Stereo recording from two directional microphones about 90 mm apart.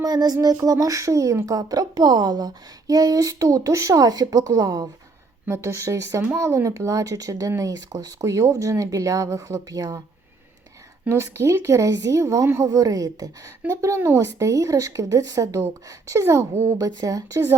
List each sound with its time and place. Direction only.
0.0 s a sound: 50° right (ahead or behind)
0.4 s a woman's voice: 40° right (ahead or behind)
11.1 s a woman's voice: 30° right (ahead or behind)
13.7 s a woman's voice: 30° right (ahead or behind)
16.8 s a woman's voice: 40° right (ahead or behind)